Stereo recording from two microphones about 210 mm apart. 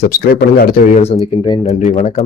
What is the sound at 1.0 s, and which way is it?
A man's voice, 25° left (ahead or behind).